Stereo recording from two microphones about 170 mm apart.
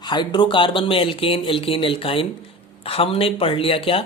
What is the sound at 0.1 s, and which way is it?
Speech, 25° left (ahead or behind).